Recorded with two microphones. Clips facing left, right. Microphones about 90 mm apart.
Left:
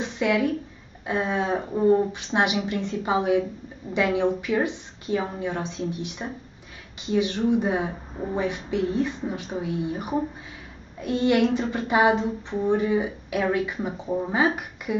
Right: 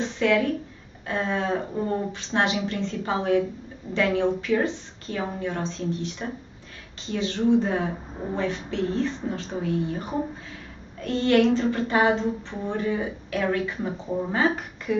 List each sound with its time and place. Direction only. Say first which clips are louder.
0.0 s speech: right 1 dB; 15° left (ahead or behind)